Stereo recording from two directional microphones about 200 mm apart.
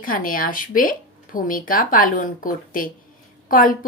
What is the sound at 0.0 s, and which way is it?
Speech, 45° left (ahead or behind).